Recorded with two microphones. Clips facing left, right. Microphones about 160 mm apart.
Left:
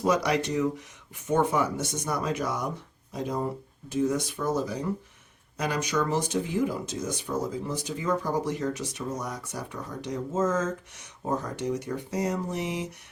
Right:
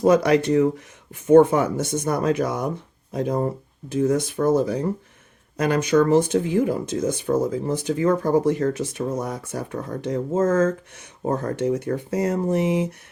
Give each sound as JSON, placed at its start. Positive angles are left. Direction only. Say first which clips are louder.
{"t": 0.0, "sound": "speech", "louder": "right 8 dB", "side_deg": -55}